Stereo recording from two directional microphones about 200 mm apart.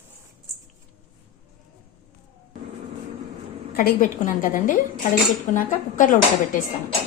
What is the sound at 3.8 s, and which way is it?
A woman's voice, 45° left (ahead or behind).